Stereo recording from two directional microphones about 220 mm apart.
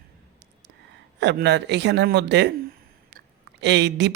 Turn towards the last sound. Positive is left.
turn(degrees=-50)  # may be behind; listen again after turning